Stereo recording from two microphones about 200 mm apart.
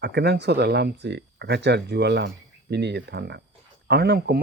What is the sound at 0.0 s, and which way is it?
Speech, 55° right (ahead or behind).